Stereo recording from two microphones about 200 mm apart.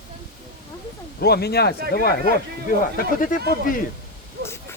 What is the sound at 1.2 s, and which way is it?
Speech, 55° left (ahead or behind).